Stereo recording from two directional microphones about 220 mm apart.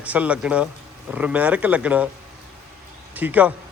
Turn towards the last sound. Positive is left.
turn(degrees=-5)  # may be behind; listen again after turning